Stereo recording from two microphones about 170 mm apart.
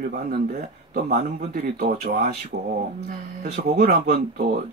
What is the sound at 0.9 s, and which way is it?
Speech, 55° right (ahead or behind).